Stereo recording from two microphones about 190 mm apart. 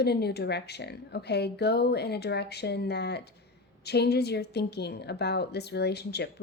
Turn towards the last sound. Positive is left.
turn(degrees=60)  # may be behind; listen again after turning